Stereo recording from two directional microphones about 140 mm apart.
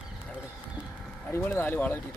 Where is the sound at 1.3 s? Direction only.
15° left (ahead or behind).